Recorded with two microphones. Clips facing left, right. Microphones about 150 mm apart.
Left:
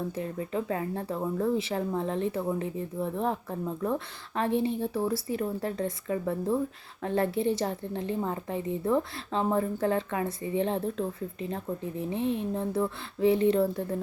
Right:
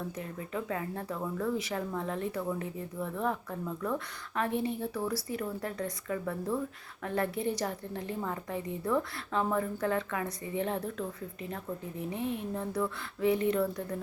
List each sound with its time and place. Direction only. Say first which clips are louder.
0.3 s a woman's voice: left 3 dB; 30° left (ahead or behind)